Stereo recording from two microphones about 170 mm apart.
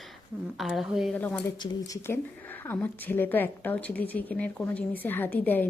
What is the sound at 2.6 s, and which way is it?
A woman's voice, 10° left (ahead or behind).